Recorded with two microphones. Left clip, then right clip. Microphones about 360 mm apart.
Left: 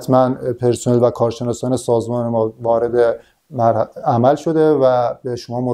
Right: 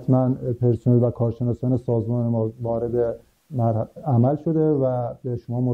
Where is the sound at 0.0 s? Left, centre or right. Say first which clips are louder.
Left 8 dB; centre.